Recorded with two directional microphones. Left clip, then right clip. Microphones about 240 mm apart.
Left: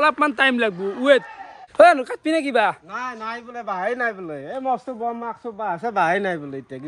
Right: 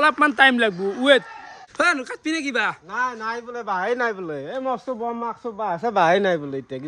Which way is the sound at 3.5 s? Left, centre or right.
Centre.